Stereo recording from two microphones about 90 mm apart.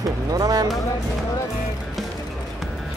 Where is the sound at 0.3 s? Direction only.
45° right (ahead or behind).